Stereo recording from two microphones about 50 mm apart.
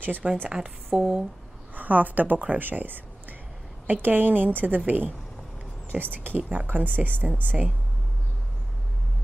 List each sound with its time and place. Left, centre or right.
0.0 s a woman's voice: right
0.5 s speech: centre
1.8 s a woman's voice: right
6.3 s a woman's voice: right